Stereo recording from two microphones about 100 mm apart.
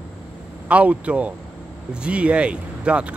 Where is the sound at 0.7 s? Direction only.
15° right (ahead or behind).